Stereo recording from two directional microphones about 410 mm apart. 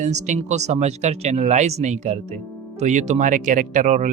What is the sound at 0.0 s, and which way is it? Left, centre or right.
Speech, centre.